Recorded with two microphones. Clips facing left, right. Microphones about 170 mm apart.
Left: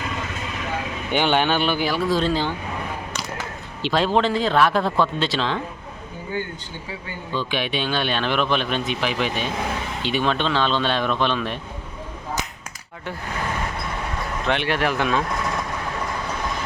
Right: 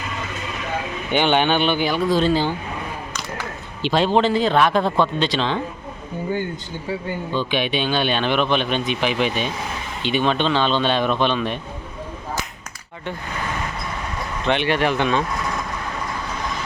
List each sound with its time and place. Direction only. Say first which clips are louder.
1.1 s speech: right 2 dB; 5° left (ahead or behind)
3.8 s speech: right 2 dB; centre (ahead or behind)
7.3 s speech: right 2 dB; centre (ahead or behind)
14.4 s speech: right 3 dB; centre (ahead or behind)